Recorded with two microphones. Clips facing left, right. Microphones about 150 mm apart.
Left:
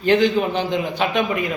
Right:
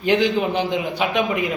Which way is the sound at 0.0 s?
15° right (ahead or behind).